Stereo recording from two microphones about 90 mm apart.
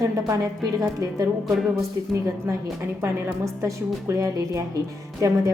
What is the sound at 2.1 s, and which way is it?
A woman's voice, 35° right (ahead or behind).